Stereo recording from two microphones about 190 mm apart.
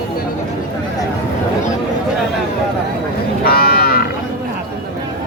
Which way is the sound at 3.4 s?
55° left (ahead or behind).